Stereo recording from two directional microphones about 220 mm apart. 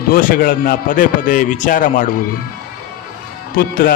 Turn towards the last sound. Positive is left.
turn(degrees=45)  # may be behind; listen again after turning